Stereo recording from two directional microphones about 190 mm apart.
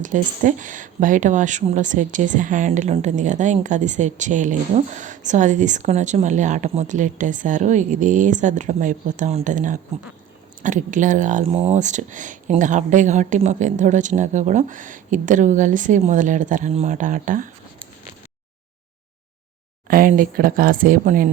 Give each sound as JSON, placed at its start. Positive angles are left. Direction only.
{"t": 0.0, "sound": "speech", "side_deg": -40}
{"t": 19.9, "sound": "speech", "side_deg": -45}